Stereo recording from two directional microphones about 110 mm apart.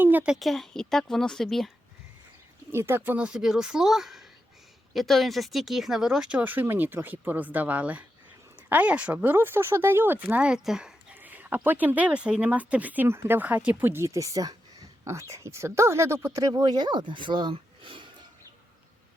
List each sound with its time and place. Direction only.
0.0 s a sound: 15° right (ahead or behind)
0.3 s speech: centre (ahead or behind)
2.7 s speech: 20° right (ahead or behind); by 18.0 s 50° right (ahead or behind)